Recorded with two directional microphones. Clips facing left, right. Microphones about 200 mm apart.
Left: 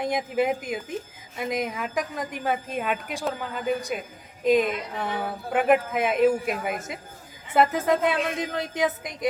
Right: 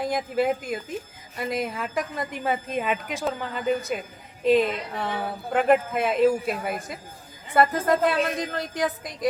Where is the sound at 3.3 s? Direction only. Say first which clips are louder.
Right 2 dB; 5° left (ahead or behind).